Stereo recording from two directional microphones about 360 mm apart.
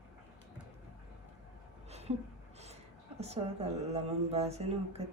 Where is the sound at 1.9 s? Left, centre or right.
Centre.